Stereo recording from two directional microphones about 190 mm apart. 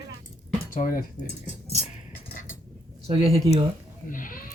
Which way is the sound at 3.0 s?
30° right (ahead or behind).